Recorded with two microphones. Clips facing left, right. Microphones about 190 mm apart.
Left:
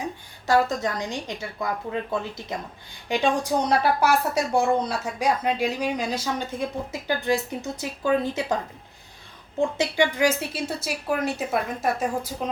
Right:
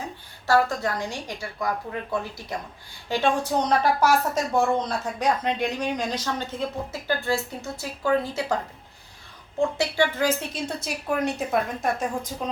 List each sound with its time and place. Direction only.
0.4 s a woman's voice: 20° left (ahead or behind)
9.7 s a woman's voice: 15° left (ahead or behind)